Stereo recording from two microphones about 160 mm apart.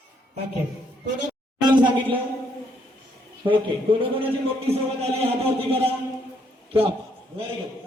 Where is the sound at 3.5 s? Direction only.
35° right (ahead or behind).